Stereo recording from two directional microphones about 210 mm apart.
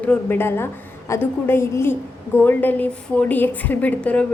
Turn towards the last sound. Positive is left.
turn(degrees=5)  # may be behind; listen again after turning